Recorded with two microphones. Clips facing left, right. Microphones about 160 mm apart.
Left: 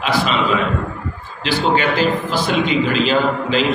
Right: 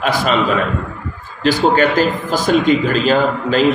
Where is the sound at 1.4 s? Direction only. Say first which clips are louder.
Right 4 dB; 45° right (ahead or behind).